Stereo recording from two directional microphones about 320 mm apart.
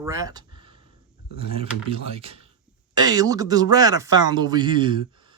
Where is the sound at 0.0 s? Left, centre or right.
Centre.